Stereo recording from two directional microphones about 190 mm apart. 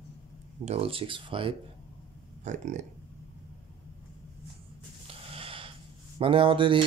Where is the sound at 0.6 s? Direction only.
30° right (ahead or behind).